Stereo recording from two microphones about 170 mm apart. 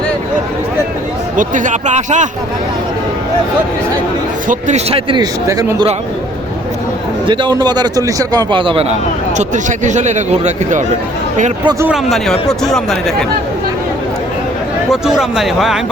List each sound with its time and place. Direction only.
1.4 s speech: 50° right (ahead or behind)
4.4 s a man's voice: 40° right (ahead or behind); by 5.7 s 20° right (ahead or behind)
7.3 s a man's voice: 25° right (ahead or behind)
9.4 s speech: 45° right (ahead or behind)
11.6 s a man's voice: 25° right (ahead or behind)
11.9 s speech: centre (ahead or behind)
14.8 s speech: 5° right (ahead or behind)